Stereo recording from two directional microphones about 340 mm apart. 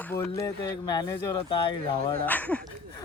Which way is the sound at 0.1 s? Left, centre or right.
Centre.